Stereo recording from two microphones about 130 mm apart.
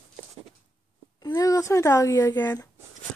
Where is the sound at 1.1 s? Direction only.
30° left (ahead or behind).